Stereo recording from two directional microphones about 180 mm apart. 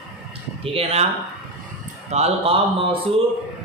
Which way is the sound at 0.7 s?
35° right (ahead or behind).